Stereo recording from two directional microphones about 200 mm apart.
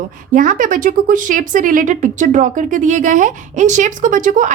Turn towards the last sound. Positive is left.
turn(degrees=-40)  # may be behind; listen again after turning